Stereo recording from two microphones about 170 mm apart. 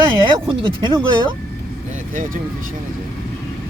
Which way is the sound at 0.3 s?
30° right (ahead or behind).